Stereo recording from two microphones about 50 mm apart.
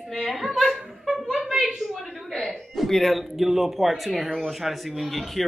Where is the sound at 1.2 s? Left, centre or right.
Centre.